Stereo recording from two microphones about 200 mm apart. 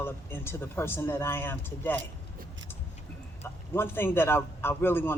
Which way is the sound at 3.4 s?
10° left (ahead or behind).